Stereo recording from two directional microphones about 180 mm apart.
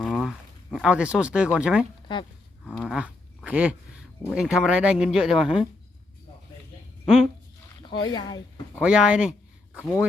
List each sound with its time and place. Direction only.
0.0 s speech: centre (ahead or behind)
2.6 s dog: 5° left (ahead or behind)
4.3 s speech: 5° right (ahead or behind)
7.8 s speech: 25° left (ahead or behind)
8.8 s speech: 5° right (ahead or behind)